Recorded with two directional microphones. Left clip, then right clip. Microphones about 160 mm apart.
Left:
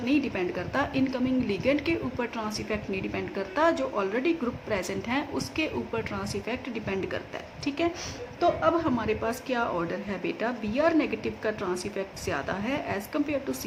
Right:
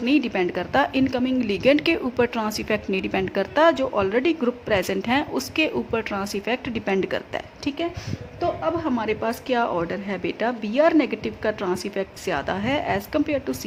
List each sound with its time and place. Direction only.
0.0 s a woman's voice: 45° right (ahead or behind)
8.4 s speech: 20° right (ahead or behind)
9.0 s a woman's voice: 40° right (ahead or behind)